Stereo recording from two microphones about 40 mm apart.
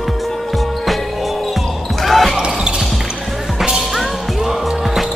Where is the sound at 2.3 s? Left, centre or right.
Centre.